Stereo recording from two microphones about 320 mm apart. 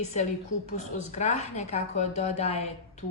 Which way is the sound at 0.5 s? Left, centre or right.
Left.